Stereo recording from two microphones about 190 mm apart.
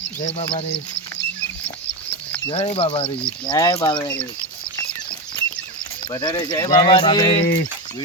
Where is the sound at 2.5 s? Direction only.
30° left (ahead or behind).